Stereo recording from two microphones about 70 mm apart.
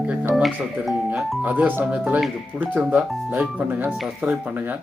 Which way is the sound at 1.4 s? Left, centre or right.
Right.